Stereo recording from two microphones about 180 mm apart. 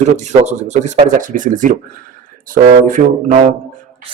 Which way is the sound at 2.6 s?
45° right (ahead or behind).